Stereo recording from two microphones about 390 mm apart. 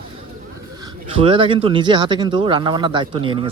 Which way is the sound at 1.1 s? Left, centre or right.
Centre.